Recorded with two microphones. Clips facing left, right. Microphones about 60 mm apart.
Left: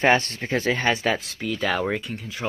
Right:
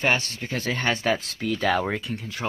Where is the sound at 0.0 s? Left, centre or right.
Left.